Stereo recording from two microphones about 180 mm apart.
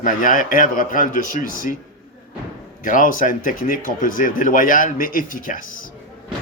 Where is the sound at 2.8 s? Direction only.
50° left (ahead or behind).